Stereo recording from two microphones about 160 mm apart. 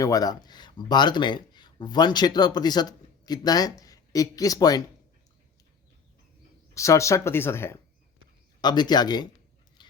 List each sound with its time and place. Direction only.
0.0 s speech: 20° left (ahead or behind)
6.7 s speech: 20° left (ahead or behind)
8.6 s speech: 25° left (ahead or behind)
9.8 s a sound: 30° left (ahead or behind)